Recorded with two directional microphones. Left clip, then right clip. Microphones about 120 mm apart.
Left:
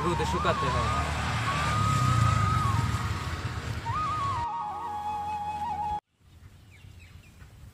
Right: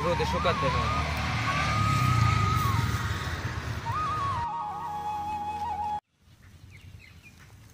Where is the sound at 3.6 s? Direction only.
Centre (ahead or behind).